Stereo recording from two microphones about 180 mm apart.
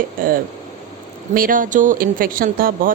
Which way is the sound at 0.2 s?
50° right (ahead or behind).